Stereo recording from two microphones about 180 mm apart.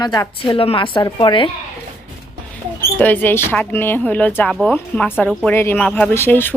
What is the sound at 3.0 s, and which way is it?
A woman's voice, 10° left (ahead or behind).